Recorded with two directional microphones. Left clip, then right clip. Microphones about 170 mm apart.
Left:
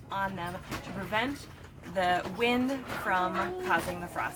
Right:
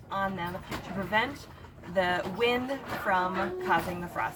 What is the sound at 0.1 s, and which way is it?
Speech, 15° left (ahead or behind).